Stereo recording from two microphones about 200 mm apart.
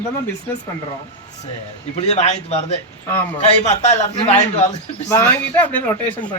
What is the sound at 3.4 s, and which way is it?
A man's voice, 35° left (ahead or behind).